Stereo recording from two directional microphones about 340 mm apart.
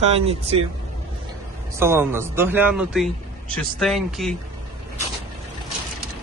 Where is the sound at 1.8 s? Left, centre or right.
Centre.